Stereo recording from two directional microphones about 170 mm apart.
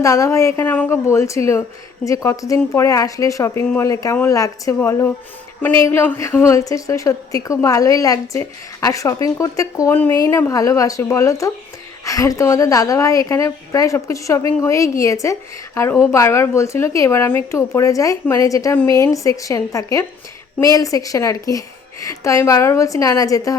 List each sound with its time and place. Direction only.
0.0 s a woman's voice: 20° left (ahead or behind)